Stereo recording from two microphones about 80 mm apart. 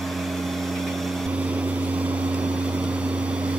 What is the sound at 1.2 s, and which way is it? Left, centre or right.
Vehicle, centre.